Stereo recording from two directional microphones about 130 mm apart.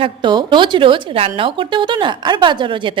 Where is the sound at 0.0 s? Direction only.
35° right (ahead or behind).